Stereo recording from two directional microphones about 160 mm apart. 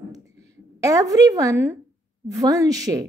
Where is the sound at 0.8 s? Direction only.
20° right (ahead or behind).